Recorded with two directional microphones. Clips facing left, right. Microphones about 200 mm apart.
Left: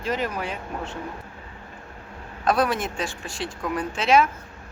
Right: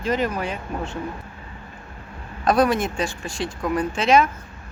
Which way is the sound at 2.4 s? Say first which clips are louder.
Right 4 dB; centre (ahead or behind).